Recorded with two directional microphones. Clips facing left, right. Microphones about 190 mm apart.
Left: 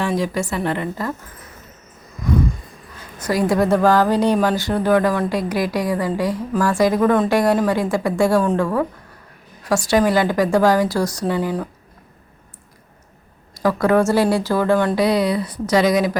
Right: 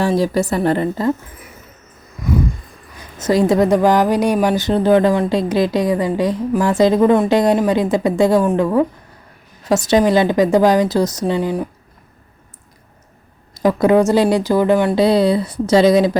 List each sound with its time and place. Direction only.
0.0 s a woman's voice: 35° right (ahead or behind)
2.9 s a woman's voice: 20° right (ahead or behind)
13.5 s a woman's voice: 20° right (ahead or behind)
15.0 s a woman's voice: 30° right (ahead or behind)